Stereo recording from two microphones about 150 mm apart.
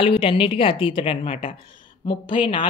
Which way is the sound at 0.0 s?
35° left (ahead or behind).